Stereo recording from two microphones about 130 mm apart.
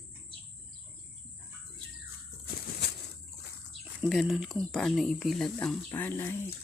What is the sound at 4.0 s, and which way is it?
Speech, 5° right (ahead or behind).